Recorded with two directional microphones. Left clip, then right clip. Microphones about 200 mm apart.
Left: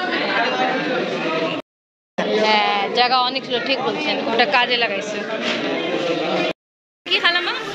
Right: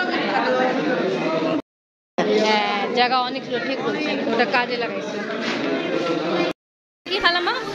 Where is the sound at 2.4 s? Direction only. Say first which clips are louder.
Left 3 dB; 15° right (ahead or behind).